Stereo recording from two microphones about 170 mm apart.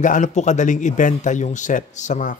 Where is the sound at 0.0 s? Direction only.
45° left (ahead or behind).